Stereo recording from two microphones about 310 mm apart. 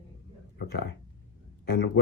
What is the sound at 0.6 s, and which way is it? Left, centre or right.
A man's voice, left.